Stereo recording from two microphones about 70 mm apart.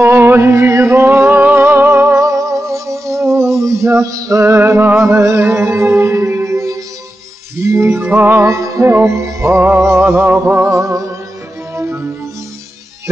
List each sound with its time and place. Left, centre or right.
0.0 s music: right
2.1 s music: right
7.5 s music: right
8.4 s music: right
10.6 s music: right